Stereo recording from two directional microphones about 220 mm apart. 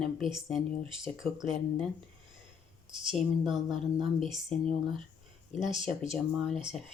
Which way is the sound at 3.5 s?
Centre (ahead or behind).